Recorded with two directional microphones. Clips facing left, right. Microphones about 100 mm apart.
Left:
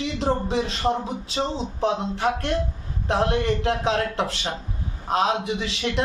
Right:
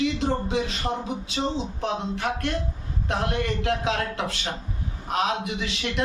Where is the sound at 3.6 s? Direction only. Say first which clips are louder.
Left 3 dB; 35° left (ahead or behind).